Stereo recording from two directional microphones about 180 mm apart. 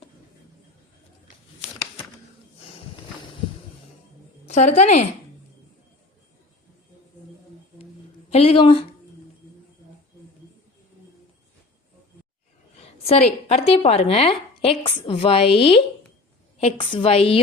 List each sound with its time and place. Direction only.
4.4 s a woman's voice: 40° left (ahead or behind)
8.3 s speech: 30° left (ahead or behind)
13.1 s a woman's voice: 35° left (ahead or behind)